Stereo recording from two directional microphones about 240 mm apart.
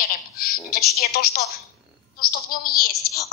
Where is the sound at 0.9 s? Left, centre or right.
Left.